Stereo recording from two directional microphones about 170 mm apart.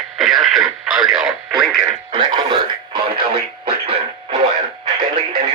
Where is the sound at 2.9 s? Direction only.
30° right (ahead or behind).